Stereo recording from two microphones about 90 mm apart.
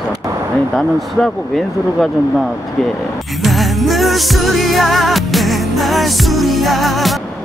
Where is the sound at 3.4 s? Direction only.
Centre (ahead or behind).